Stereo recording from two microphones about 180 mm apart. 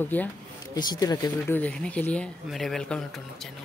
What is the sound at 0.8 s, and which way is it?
Speech, 20° left (ahead or behind).